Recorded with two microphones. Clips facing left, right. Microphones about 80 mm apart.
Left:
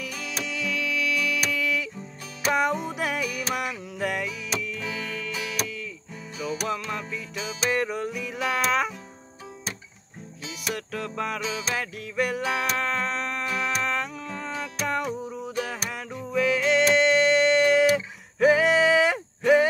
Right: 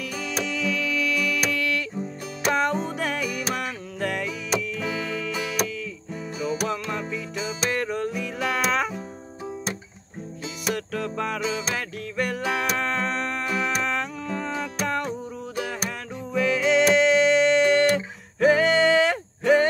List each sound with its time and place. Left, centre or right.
0.0 s music: centre
10.7 s music: centre